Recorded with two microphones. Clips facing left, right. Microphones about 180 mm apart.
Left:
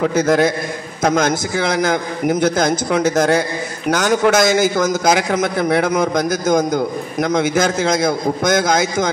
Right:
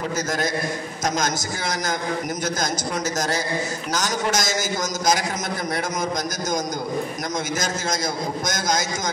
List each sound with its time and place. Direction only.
0.0 s a man's voice: 60° left (ahead or behind)